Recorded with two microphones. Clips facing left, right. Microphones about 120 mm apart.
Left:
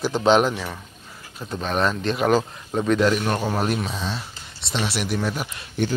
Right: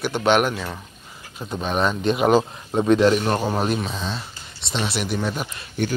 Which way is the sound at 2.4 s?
20° right (ahead or behind).